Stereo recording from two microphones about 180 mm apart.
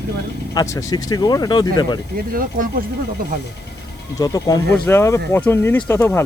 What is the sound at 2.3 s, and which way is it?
Speech, 50° right (ahead or behind).